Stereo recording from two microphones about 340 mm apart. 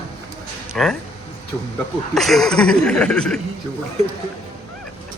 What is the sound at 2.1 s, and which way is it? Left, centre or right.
A man's voice, centre.